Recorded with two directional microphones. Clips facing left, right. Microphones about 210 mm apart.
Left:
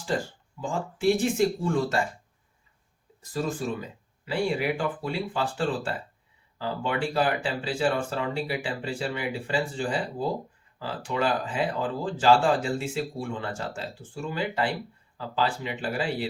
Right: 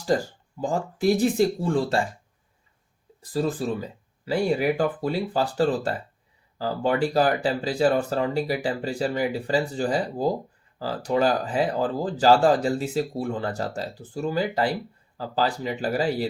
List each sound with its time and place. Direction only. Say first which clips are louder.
0.1 s speech: right 4 dB; 40° right (ahead or behind)
3.2 s speech: right 4 dB; 35° right (ahead or behind)